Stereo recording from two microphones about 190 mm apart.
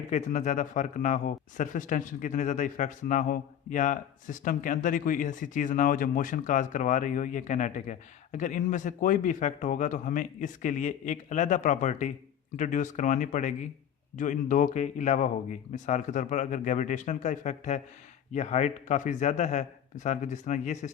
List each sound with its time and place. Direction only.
0.1 s speech: 40° left (ahead or behind)